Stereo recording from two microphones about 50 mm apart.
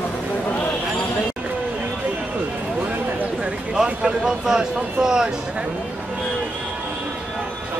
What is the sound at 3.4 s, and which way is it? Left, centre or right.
Speech, centre.